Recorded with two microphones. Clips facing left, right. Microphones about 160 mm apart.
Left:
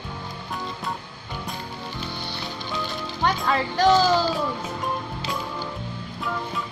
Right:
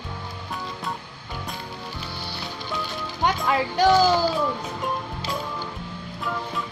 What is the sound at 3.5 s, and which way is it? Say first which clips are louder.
Speech: even; 15° right (ahead or behind).